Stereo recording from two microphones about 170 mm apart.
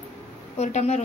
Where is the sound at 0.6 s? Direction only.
40° left (ahead or behind).